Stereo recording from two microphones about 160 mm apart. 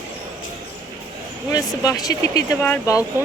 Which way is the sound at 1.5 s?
20° left (ahead or behind).